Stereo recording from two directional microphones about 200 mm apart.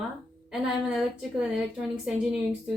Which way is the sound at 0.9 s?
Centre (ahead or behind).